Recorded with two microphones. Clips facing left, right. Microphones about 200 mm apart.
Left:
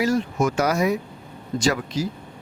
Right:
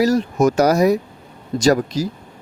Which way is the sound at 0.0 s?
40° right (ahead or behind).